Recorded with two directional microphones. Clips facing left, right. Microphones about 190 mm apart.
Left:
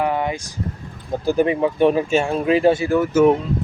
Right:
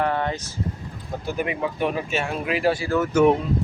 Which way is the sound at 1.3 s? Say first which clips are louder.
Left 9 dB; 30° left (ahead or behind).